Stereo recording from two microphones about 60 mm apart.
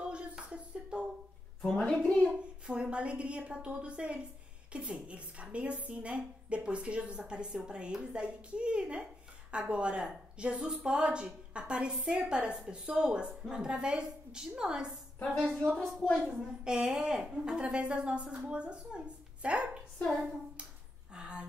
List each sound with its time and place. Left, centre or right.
0.0 s a sound: centre
2.6 s a woman's voice: centre
15.2 s a woman's voice: centre
16.2 s a woman's voice: centre
21.1 s speech: centre